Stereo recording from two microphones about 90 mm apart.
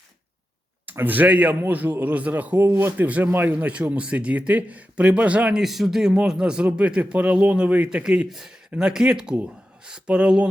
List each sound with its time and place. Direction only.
0.9 s a man's voice: 20° right (ahead or behind)